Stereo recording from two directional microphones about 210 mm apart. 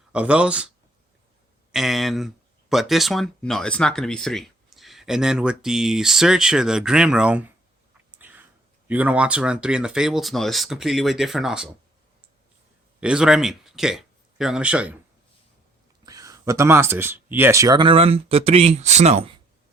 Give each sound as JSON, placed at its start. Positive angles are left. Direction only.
{"t": 0.1, "sound": "speech", "side_deg": -5}
{"t": 1.7, "sound": "speech", "side_deg": 0}
{"t": 8.2, "sound": "a sound", "side_deg": -10}
{"t": 8.9, "sound": "speech", "side_deg": -5}
{"t": 13.0, "sound": "speech", "side_deg": -5}
{"t": 16.0, "sound": "speech", "side_deg": -15}